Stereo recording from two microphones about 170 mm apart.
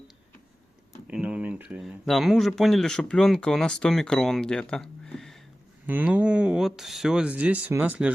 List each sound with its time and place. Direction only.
1.0 s speech: 5° right (ahead or behind)
5.8 s speech: 10° right (ahead or behind)